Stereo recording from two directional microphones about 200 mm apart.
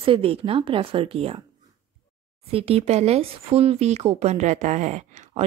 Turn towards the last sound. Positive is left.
turn(degrees=-35)  # may be behind; listen again after turning